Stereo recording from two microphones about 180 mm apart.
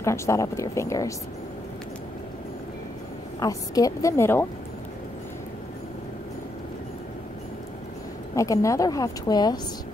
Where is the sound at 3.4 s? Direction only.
20° left (ahead or behind).